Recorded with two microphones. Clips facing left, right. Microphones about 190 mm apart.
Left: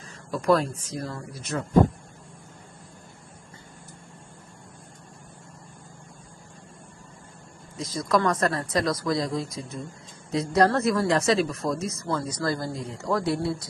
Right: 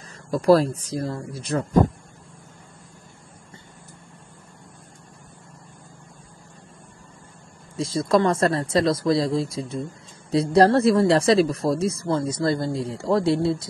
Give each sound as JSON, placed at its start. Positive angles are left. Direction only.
{"t": 0.3, "sound": "speech", "side_deg": -35}
{"t": 7.7, "sound": "speech", "side_deg": -30}